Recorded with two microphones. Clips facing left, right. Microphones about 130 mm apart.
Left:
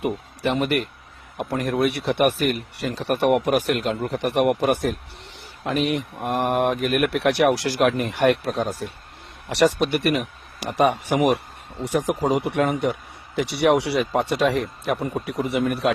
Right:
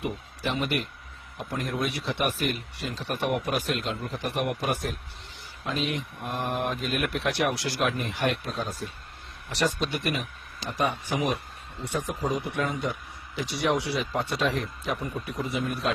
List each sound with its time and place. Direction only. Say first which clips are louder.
0.0 s speech: left 7 dB; 60° left (ahead or behind)
1.4 s speech: left 8 dB; 65° left (ahead or behind)
5.8 s speech: left 7 dB; 70° left (ahead or behind)
11.8 s speech: left 8 dB; 90° left; by 15.9 s 70° left (ahead or behind)